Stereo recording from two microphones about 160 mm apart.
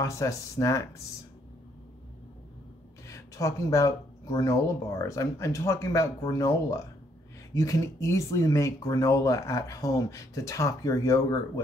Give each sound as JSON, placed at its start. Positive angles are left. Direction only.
{"t": 0.0, "sound": "speech", "side_deg": 20}
{"t": 3.1, "sound": "speech", "side_deg": 20}